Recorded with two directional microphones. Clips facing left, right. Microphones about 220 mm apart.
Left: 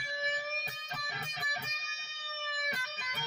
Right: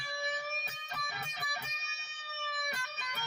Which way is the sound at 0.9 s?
20° left (ahead or behind).